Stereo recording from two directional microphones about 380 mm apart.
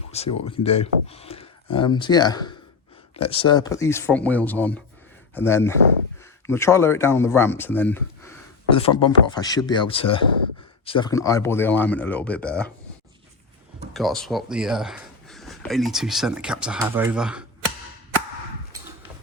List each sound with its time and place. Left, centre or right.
0.4 s speech: centre
13.9 s speech: centre